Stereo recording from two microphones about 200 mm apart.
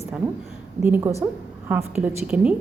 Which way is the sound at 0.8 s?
10° right (ahead or behind).